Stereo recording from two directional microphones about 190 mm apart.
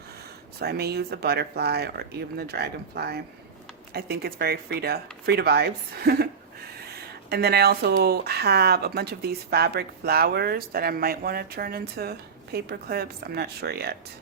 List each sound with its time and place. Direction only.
0.6 s speech: 55° right (ahead or behind)
7.3 s speech: 55° right (ahead or behind)